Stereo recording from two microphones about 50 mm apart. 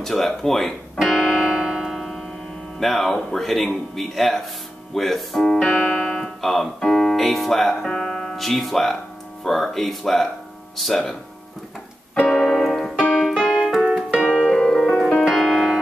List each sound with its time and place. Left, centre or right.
0.0 s music: centre
2.8 s piano: centre
4.9 s speech: centre
6.9 s piano: centre
12.3 s keyboard: centre
13.8 s keyboard: centre
14.5 s music: centre